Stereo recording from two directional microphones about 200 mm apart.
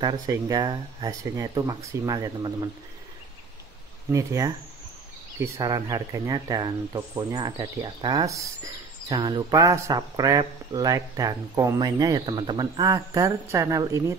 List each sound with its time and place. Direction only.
0.0 s speech: 20° right (ahead or behind)
4.1 s speech: 15° right (ahead or behind)